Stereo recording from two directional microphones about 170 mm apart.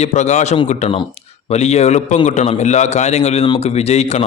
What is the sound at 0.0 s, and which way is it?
A man's voice, 45° left (ahead or behind).